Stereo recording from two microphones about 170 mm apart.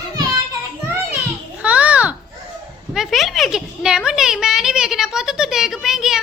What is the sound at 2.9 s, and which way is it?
A child's voice, centre (ahead or behind).